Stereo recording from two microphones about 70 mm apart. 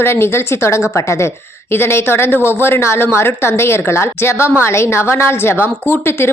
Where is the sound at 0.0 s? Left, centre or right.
Left.